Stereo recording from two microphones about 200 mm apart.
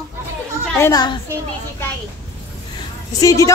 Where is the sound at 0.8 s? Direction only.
15° left (ahead or behind).